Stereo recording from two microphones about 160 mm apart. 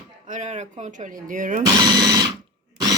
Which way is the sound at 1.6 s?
25° right (ahead or behind).